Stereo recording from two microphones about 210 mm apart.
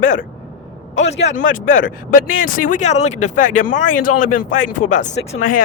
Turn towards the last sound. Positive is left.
turn(degrees=40)  # may be behind; listen again after turning